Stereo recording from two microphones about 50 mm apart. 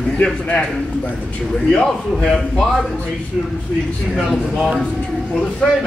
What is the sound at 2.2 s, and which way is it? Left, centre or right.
Speech, left.